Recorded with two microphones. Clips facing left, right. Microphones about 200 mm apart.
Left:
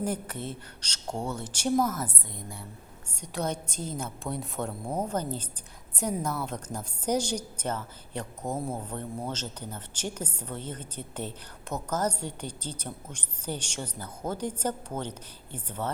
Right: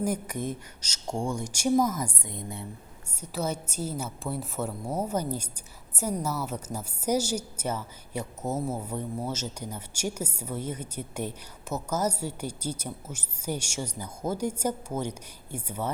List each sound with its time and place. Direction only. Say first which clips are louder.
0.0 s a woman's voice: right 3 dB; 10° right (ahead or behind)
2.2 s a woman's voice: right 4 dB; 20° right (ahead or behind)
3.2 s a woman's voice: right 1 dB; 5° right (ahead or behind)